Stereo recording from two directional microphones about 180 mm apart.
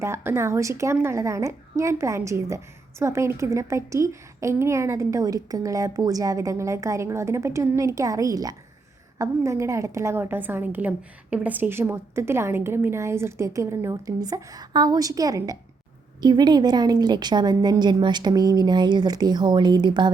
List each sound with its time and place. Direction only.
0.0 s a woman's voice: 15° right (ahead or behind)